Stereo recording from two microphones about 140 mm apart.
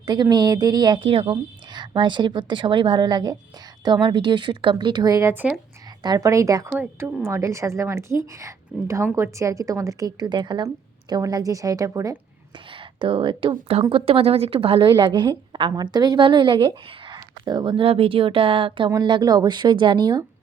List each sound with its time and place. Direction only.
0.0 s a woman's voice: 30° right (ahead or behind)
6.0 s a woman's voice: 30° right (ahead or behind)
12.7 s a woman's voice: 35° right (ahead or behind)